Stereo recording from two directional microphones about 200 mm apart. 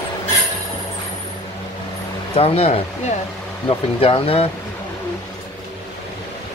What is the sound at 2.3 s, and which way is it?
Speech, 30° left (ahead or behind).